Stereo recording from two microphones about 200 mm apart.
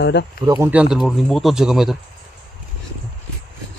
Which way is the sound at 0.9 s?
Centre (ahead or behind).